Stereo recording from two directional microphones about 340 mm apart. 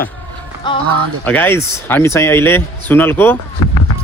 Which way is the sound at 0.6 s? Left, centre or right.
Centre.